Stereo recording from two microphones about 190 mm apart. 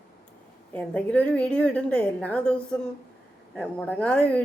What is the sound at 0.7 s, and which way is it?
Speech, 5° left (ahead or behind).